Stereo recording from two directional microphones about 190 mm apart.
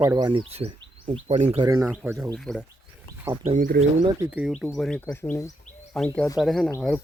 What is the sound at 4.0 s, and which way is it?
Speech, 20° right (ahead or behind).